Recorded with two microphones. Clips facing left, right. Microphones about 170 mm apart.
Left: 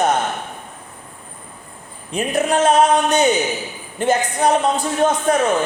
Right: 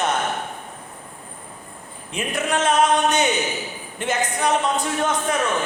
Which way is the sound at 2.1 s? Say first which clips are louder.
Left 6 dB; 35° left (ahead or behind).